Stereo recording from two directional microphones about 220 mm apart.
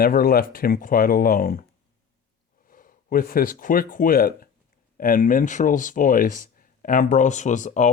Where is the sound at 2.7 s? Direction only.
40° left (ahead or behind).